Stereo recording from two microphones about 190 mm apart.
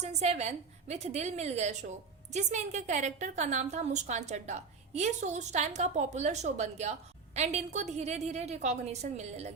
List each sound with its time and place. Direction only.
0.0 s a woman's voice: 35° right (ahead or behind)